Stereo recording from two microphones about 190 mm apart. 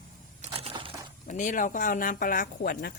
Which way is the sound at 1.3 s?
40° left (ahead or behind).